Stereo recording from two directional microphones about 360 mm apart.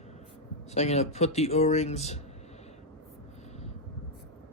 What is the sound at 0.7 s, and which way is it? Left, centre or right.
Speech, centre.